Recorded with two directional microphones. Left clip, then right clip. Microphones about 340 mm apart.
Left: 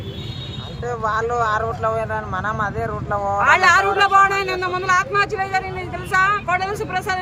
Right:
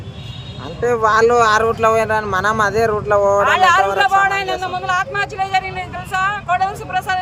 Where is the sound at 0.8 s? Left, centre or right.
Right.